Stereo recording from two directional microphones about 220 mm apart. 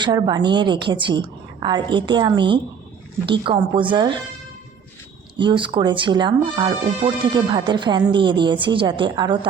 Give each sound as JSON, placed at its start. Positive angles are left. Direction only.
{"t": 0.0, "sound": "speech", "side_deg": -20}
{"t": 5.4, "sound": "speech", "side_deg": -20}